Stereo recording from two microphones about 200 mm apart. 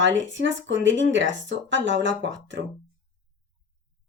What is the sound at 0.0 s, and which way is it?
Speech, 70° right (ahead or behind).